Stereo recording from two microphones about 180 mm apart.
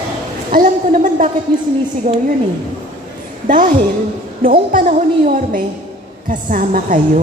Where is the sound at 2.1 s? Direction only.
45° right (ahead or behind).